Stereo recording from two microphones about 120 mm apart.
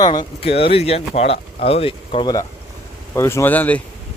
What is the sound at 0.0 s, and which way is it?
Speech, 35° left (ahead or behind).